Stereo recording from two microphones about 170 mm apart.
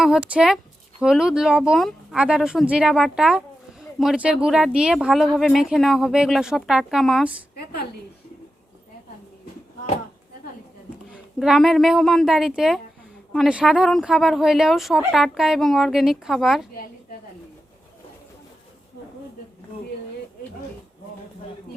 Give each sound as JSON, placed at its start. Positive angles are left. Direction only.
{"t": 0.0, "sound": "speech", "side_deg": -5}
{"t": 7.5, "sound": "a sound", "side_deg": 70}
{"t": 11.1, "sound": "speech", "side_deg": 0}